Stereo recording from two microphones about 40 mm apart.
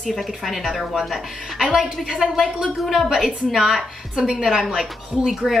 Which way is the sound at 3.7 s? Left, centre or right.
Centre.